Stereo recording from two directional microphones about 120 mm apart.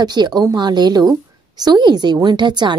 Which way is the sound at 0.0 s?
35° right (ahead or behind).